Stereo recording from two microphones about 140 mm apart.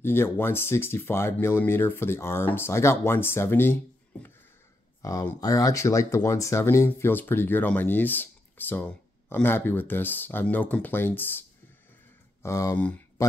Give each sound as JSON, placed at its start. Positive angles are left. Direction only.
{"t": 0.0, "sound": "speech", "side_deg": 15}
{"t": 12.4, "sound": "speech", "side_deg": 20}